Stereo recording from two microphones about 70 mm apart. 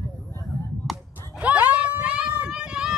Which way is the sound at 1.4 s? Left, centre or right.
Centre.